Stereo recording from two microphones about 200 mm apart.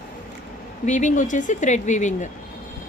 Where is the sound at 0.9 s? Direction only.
40° left (ahead or behind).